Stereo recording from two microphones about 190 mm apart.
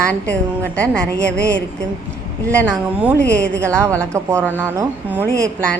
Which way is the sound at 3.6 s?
15° right (ahead or behind).